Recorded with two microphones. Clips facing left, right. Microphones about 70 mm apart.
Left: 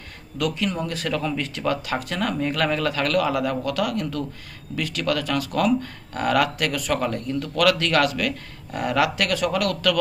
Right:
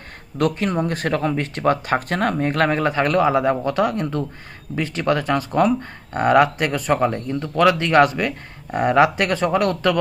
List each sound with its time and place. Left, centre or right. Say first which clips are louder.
0.3 s speech: right 5 dB; right